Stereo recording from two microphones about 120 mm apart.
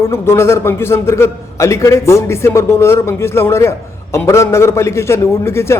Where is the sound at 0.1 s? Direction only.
20° left (ahead or behind).